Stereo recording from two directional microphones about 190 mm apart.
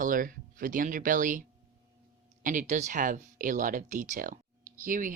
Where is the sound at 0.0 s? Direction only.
45° right (ahead or behind).